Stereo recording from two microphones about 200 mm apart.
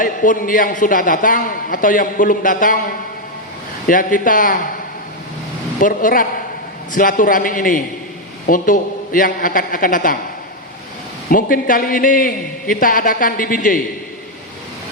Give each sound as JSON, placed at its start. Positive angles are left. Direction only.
{"t": 0.0, "sound": "a man's voice", "side_deg": 40}
{"t": 5.8, "sound": "a man's voice", "side_deg": 45}
{"t": 11.3, "sound": "a man's voice", "side_deg": 45}